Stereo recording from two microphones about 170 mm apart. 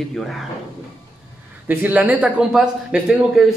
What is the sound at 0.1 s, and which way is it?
Speech, centre (ahead or behind).